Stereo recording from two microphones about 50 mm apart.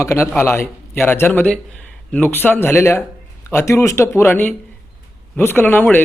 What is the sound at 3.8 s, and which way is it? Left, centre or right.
A man's voice, left.